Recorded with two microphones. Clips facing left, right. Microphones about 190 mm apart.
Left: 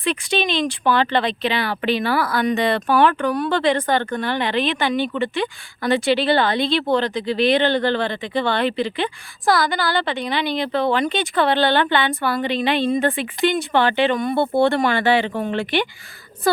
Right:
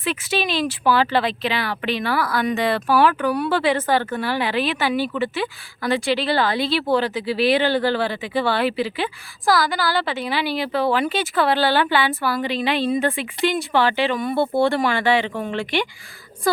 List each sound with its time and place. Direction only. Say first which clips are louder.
0.0 s speech: left 2 dB; 5° right (ahead or behind)
15.2 s speech: left 3 dB; 35° left (ahead or behind)